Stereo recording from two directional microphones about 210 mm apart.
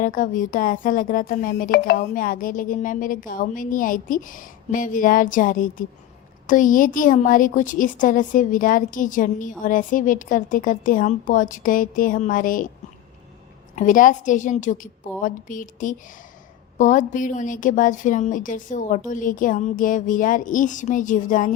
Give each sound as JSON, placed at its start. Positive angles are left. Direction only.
{"t": 0.0, "sound": "a woman's voice", "side_deg": 40}
{"t": 13.7, "sound": "a woman's voice", "side_deg": 40}